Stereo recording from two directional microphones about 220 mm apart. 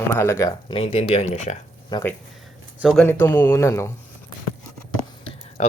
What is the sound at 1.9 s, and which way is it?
Speech, 20° left (ahead or behind).